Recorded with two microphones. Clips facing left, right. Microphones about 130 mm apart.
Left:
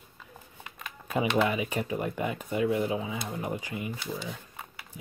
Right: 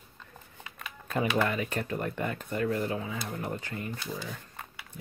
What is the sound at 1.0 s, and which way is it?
Speech, 10° left (ahead or behind).